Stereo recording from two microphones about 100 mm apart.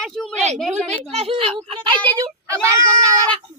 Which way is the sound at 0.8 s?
85° right.